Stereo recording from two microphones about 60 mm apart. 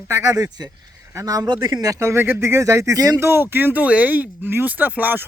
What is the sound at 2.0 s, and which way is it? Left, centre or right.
Speech, right.